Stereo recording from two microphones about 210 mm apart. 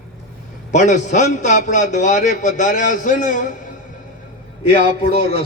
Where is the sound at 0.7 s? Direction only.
35° left (ahead or behind).